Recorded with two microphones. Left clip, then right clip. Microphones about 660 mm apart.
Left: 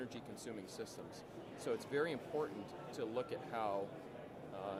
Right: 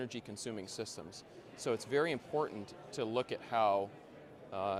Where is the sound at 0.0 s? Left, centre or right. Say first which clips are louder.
Right 5 dB; right.